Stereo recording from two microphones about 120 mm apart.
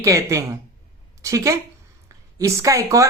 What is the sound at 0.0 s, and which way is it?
Speech, 25° right (ahead or behind).